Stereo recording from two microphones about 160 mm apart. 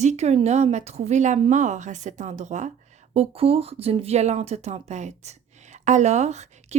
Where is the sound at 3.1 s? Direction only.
40° right (ahead or behind).